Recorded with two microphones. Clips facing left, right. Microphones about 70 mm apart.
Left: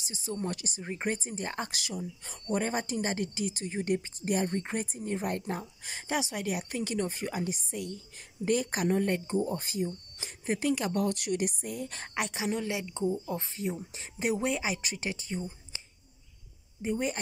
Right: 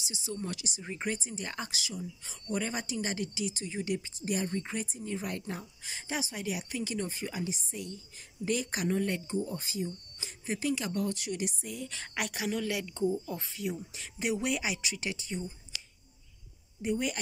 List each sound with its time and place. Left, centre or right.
0.0 s speech: left
1.7 s speech: left
12.1 s a woman's voice: left
16.8 s a woman's voice: left